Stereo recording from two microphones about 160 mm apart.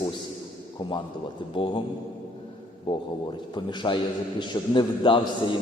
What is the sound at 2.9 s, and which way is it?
A man's voice, 30° left (ahead or behind).